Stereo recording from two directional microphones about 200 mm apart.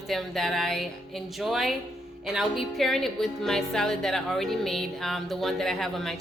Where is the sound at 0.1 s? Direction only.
Centre (ahead or behind).